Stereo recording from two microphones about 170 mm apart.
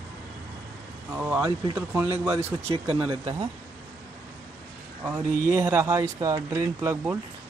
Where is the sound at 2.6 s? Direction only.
35° right (ahead or behind).